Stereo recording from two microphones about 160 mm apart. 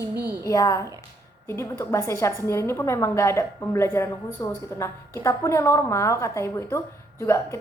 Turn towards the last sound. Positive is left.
turn(degrees=15)  # may be behind; listen again after turning